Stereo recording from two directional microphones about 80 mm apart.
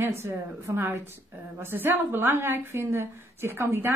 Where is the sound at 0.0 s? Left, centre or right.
Right.